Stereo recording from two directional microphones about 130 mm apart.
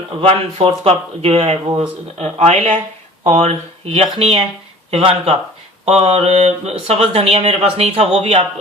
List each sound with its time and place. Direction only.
0.2 s speech: 50° right (ahead or behind)